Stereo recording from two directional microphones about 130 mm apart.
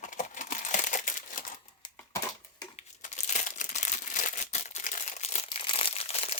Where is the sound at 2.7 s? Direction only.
60° left (ahead or behind).